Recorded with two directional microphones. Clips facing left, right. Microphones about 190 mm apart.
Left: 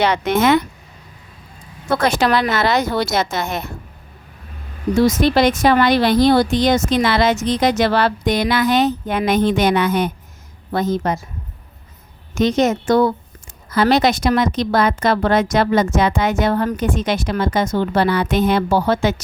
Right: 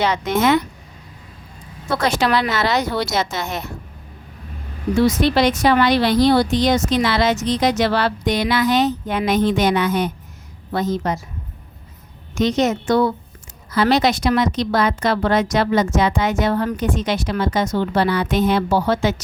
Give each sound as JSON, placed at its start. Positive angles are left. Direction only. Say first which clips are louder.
{"t": 0.0, "sound": "speech", "louder": "left 2 dB", "side_deg": 65}
{"t": 2.0, "sound": "a woman's voice", "louder": "left 1 dB", "side_deg": 50}
{"t": 4.9, "sound": "a woman's voice", "louder": "left 2 dB", "side_deg": 45}
{"t": 12.3, "sound": "a woman's voice", "louder": "left 2 dB", "side_deg": 50}